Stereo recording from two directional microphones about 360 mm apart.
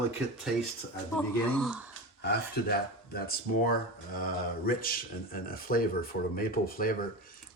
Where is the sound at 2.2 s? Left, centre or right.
Left.